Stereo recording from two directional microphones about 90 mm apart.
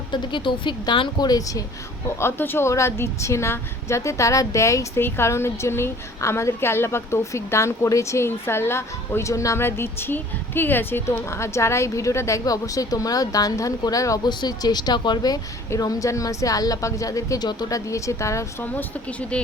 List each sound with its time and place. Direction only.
0.1 s speech: 65° left (ahead or behind)
1.3 s a woman's voice: 40° left (ahead or behind)
2.1 s a woman's voice: 25° left (ahead or behind)
14.3 s speech: 50° left (ahead or behind)
15.8 s a woman's voice: 40° left (ahead or behind)
18.6 s speech: 15° left (ahead or behind)